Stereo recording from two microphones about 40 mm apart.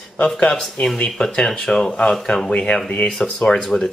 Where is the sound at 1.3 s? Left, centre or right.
Centre.